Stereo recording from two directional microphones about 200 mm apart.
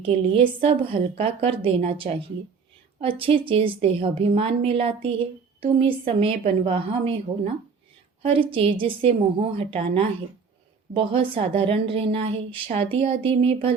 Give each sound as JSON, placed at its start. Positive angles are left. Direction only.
{"t": 0.0, "sound": "a woman's voice", "side_deg": -25}